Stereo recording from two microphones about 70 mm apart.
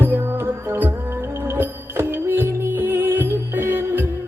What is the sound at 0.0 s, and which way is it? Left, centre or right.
Music, right.